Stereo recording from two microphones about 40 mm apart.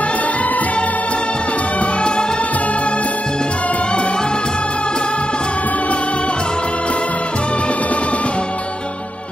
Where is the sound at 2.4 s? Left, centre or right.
Left.